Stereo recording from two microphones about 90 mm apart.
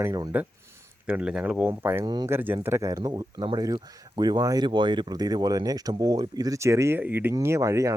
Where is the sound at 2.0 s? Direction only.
50° right (ahead or behind).